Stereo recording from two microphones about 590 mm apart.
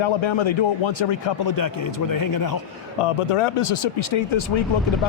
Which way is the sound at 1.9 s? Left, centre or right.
Left.